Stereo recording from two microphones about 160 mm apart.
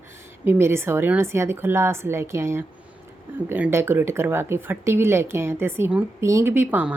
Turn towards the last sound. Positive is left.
turn(degrees=-10)  # may be behind; listen again after turning